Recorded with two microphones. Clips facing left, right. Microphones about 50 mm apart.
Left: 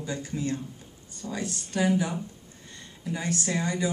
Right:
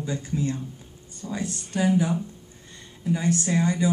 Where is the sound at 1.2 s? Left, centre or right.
Right.